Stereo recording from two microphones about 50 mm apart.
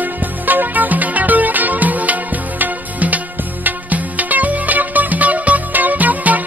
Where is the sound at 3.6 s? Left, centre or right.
Right.